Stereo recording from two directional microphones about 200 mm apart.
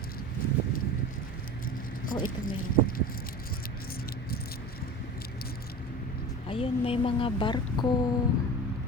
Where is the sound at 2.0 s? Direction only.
45° left (ahead or behind).